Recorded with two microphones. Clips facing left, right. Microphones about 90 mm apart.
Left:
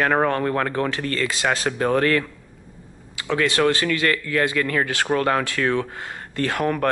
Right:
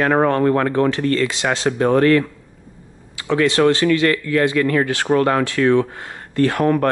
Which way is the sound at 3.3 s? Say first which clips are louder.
Right 5 dB; 25° right (ahead or behind).